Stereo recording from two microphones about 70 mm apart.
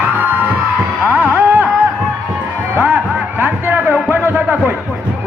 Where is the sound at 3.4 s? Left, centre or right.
Right.